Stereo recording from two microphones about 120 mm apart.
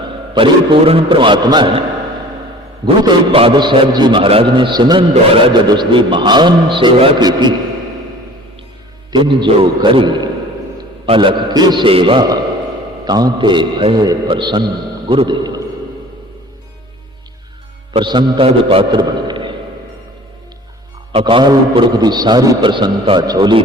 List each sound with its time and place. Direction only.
0.3 s a man's voice: 45° right (ahead or behind)
3.3 s a man's voice: 45° right (ahead or behind)
5.1 s a man's voice: 50° right (ahead or behind)
9.1 s a man's voice: 40° right (ahead or behind)
13.1 s a man's voice: 35° right (ahead or behind)
18.0 s a man's voice: 40° right (ahead or behind)
21.1 s a man's voice: 50° right (ahead or behind)